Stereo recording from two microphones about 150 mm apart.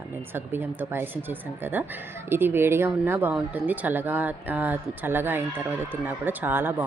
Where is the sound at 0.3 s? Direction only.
15° right (ahead or behind).